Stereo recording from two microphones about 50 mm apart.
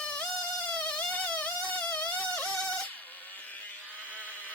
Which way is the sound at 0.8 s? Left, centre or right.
Left.